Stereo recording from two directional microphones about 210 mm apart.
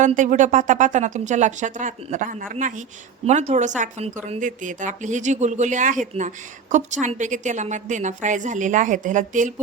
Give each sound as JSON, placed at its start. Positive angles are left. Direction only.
{"t": 0.0, "sound": "a woman's voice", "side_deg": -35}